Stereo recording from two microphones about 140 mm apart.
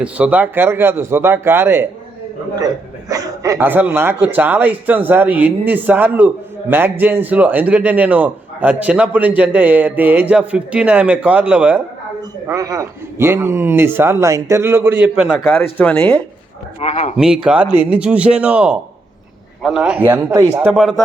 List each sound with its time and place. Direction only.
0.0 s a man's voice: 10° right (ahead or behind)
3.1 s a man's voice: 25° right (ahead or behind); by 11.8 s 10° right (ahead or behind)
12.5 s a man's voice: 25° right (ahead or behind); by 15.4 s 5° right (ahead or behind)
15.8 s speech: 10° left (ahead or behind)
16.8 s speech: 55° left (ahead or behind)
17.2 s a man's voice: 5° right (ahead or behind)
20.3 s a man's voice: 25° right (ahead or behind)
20.6 s speech: 5° right (ahead or behind)